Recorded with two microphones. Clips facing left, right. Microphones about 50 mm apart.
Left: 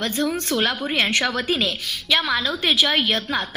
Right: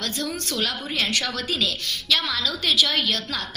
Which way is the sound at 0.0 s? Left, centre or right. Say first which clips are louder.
Left 6 dB; left.